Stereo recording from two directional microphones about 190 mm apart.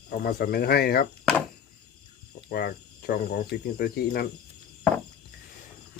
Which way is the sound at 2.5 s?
55° left (ahead or behind).